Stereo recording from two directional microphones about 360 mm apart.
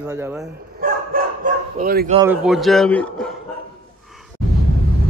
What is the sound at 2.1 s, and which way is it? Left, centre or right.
Speech, centre.